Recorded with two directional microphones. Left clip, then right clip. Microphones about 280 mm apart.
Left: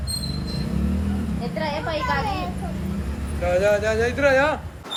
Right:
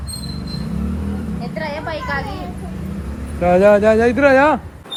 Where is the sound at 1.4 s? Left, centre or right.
Right.